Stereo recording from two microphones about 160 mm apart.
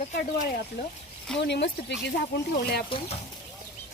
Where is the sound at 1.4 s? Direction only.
90° left.